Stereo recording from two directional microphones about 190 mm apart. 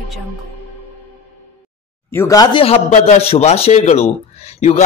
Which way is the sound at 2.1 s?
15° left (ahead or behind).